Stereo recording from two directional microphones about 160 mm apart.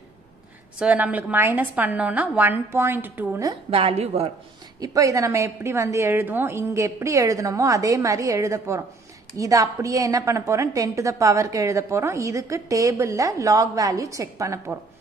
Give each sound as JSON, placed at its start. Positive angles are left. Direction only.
{"t": 0.7, "sound": "a woman's voice", "side_deg": -10}
{"t": 3.7, "sound": "a woman's voice", "side_deg": -35}
{"t": 4.7, "sound": "a woman's voice", "side_deg": -20}